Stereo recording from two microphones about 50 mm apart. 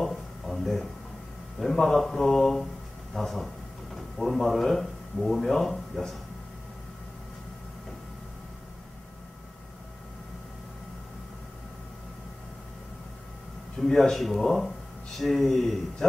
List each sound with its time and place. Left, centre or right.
0.0 s a sound: centre
1.6 s a man's voice: centre
13.7 s a man's voice: centre